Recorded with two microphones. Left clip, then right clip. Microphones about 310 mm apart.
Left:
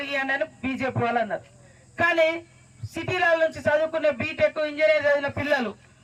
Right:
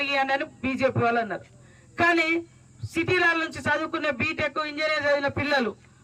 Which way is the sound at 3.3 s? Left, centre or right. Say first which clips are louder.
Left 4 dB; right.